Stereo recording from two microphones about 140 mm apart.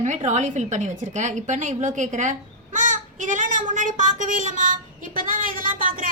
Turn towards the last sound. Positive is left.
turn(degrees=-75)  # may be behind; listen again after turning